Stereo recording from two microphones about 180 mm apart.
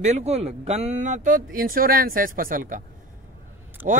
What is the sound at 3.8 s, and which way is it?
Speech, 10° right (ahead or behind).